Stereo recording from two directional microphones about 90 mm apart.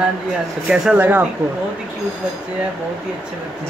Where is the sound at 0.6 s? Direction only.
10° right (ahead or behind).